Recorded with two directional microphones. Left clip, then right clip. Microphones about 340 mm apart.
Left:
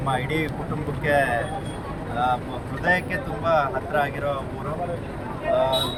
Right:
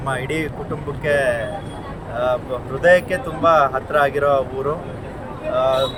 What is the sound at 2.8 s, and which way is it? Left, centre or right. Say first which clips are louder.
Speech: right 8 dB; centre.